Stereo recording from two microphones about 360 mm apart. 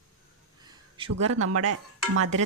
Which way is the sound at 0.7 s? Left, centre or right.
Centre.